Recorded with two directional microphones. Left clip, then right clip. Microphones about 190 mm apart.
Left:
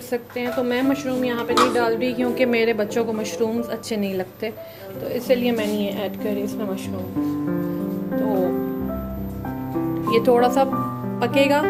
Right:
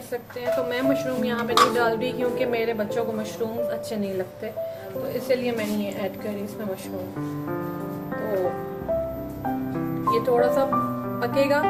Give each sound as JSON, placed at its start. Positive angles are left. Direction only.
{"t": 0.7, "sound": "speech", "side_deg": 20}
{"t": 2.4, "sound": "a woman's voice", "side_deg": 35}
{"t": 5.3, "sound": "a woman's voice", "side_deg": 45}
{"t": 10.1, "sound": "a woman's voice", "side_deg": 35}